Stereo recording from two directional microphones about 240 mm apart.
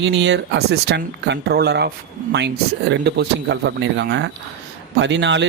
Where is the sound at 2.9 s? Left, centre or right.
Right.